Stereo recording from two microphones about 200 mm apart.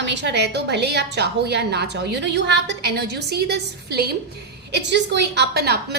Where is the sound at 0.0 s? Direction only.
60° right (ahead or behind).